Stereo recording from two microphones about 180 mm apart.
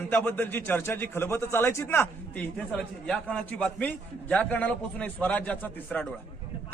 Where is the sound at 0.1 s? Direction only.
10° left (ahead or behind).